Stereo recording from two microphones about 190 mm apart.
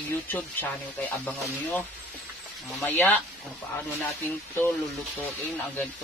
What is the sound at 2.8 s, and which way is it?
Speech, 10° left (ahead or behind).